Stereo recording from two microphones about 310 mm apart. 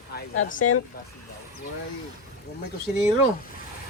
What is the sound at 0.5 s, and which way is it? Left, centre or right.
Speech, left.